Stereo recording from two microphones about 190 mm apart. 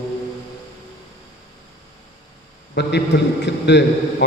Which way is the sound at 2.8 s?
65° left (ahead or behind).